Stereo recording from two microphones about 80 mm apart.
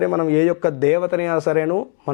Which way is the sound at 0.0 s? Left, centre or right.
Centre.